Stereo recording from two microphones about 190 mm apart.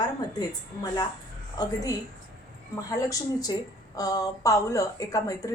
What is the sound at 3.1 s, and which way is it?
A woman's voice, 20° left (ahead or behind).